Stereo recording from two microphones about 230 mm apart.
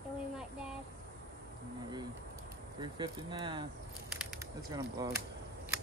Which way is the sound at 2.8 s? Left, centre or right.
Centre.